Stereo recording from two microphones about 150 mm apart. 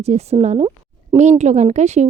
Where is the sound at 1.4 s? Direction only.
50° right (ahead or behind).